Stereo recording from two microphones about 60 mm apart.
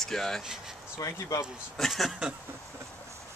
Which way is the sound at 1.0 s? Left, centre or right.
Left.